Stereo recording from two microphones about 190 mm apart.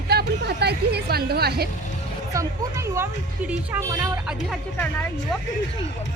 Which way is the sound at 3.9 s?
20° right (ahead or behind).